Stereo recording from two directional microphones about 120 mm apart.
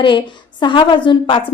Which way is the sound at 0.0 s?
40° left (ahead or behind).